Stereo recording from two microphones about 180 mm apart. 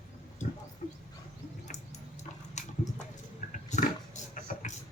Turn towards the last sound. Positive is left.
turn(degrees=45)  # may be behind; listen again after turning